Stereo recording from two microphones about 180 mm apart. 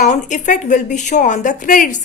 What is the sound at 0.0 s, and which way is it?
Speech, 40° left (ahead or behind).